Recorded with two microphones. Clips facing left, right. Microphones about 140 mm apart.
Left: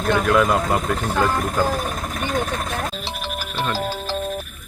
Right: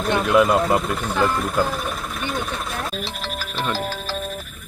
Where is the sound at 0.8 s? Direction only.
45° left (ahead or behind).